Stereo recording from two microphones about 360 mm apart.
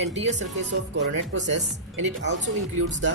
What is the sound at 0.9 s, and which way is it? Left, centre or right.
Speech, right.